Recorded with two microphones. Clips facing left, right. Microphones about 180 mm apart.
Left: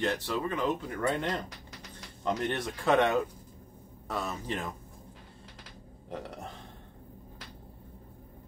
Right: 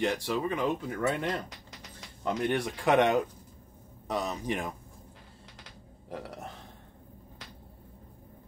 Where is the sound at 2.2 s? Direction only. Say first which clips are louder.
Right 2 dB; 10° right (ahead or behind).